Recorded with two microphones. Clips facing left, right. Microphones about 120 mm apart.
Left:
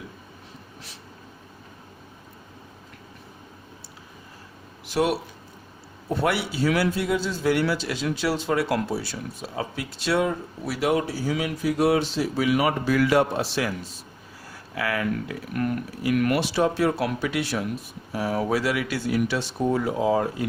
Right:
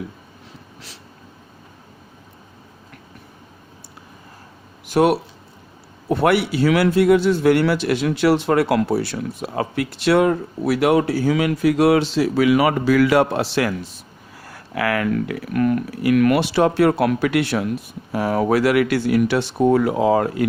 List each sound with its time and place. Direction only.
4.9 s a man's voice: 55° right (ahead or behind)